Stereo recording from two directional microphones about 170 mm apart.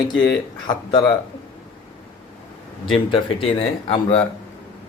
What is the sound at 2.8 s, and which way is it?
Speech, 30° left (ahead or behind).